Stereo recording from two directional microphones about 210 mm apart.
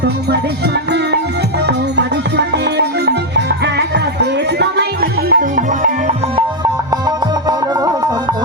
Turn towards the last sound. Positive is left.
turn(degrees=-20)  # may be behind; listen again after turning